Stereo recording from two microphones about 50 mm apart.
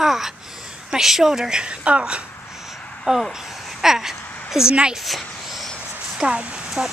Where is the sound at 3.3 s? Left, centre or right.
Centre.